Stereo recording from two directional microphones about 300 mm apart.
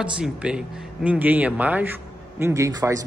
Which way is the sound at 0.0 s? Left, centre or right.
Centre.